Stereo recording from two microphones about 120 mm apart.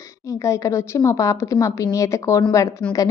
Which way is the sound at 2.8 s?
10° left (ahead or behind).